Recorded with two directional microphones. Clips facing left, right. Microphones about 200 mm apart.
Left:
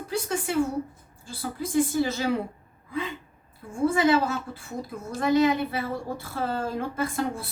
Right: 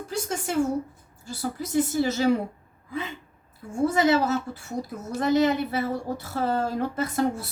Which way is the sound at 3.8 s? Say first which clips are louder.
Even; 45° right (ahead or behind).